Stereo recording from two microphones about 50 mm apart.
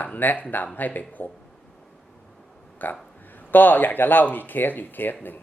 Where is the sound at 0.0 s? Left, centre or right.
Left.